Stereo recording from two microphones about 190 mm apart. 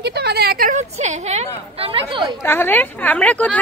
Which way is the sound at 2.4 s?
10° left (ahead or behind).